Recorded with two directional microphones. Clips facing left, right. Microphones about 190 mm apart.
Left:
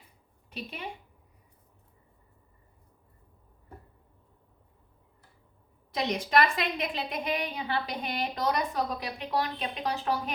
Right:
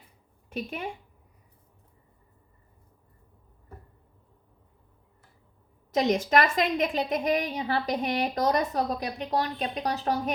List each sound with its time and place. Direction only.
0.5 s a woman's voice: 45° right (ahead or behind)
5.9 s a woman's voice: 45° right (ahead or behind)